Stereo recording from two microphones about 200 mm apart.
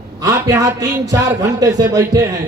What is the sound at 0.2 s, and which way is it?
Speech, 15° right (ahead or behind).